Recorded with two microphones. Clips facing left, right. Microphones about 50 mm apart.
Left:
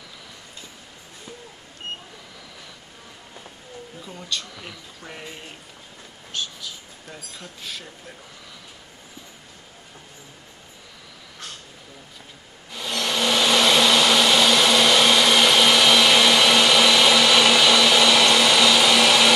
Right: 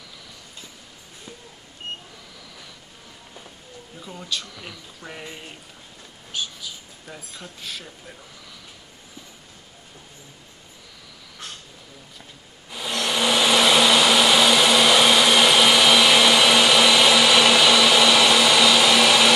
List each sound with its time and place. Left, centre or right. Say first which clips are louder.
4.0 s speech: right 1 dB; centre
12.7 s vacuum cleaner: right 1 dB; centre